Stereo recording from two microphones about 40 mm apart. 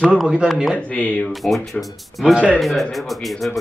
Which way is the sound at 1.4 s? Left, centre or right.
Centre.